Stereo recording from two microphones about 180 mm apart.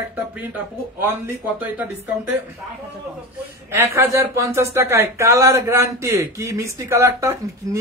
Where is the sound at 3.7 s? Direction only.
15° right (ahead or behind).